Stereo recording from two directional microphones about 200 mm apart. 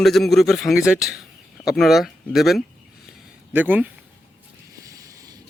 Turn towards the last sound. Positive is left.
turn(degrees=-15)  # may be behind; listen again after turning